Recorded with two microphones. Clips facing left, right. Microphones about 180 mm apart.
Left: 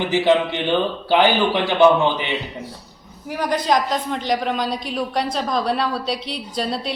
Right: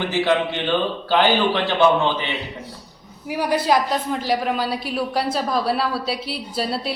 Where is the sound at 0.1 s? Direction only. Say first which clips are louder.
Left 4 dB; 15° left (ahead or behind).